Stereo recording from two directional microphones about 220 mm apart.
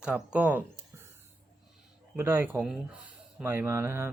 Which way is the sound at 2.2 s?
10° right (ahead or behind).